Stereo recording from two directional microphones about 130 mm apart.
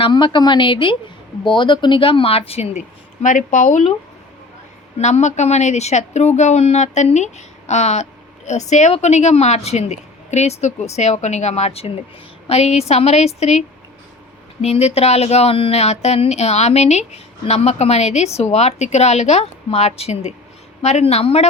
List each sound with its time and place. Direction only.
0.0 s a woman's voice: 35° left (ahead or behind); by 2.8 s 55° left (ahead or behind)
3.2 s speech: 80° left
4.9 s a woman's voice: 60° left (ahead or behind)